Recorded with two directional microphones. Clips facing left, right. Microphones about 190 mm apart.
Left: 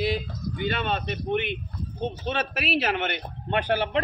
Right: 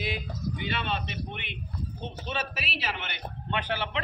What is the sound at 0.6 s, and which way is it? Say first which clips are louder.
A man's voice: left 8 dB; 45° left (ahead or behind).